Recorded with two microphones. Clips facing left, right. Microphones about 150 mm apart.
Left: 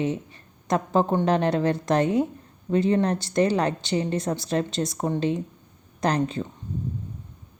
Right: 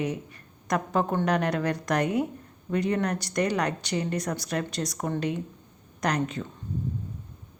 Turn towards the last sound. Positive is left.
turn(degrees=30)  # may be behind; listen again after turning